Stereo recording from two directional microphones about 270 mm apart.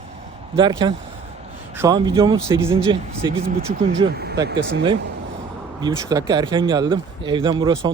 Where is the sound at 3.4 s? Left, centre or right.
Right.